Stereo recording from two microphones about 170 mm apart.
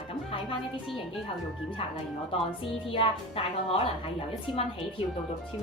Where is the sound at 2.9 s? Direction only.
30° left (ahead or behind).